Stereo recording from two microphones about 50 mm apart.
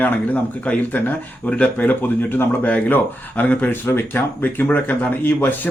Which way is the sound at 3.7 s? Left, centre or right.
Left.